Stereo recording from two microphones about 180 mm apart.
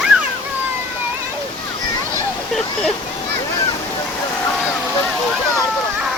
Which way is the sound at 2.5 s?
Centre (ahead or behind).